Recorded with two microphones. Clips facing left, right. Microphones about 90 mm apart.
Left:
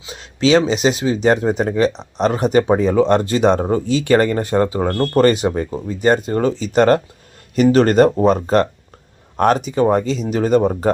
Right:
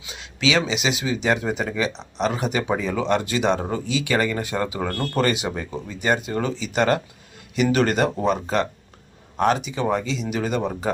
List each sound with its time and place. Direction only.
0.0 s speech: 40° left (ahead or behind)